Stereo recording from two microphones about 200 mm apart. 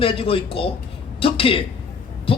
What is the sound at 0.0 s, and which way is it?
A man's voice, 25° left (ahead or behind).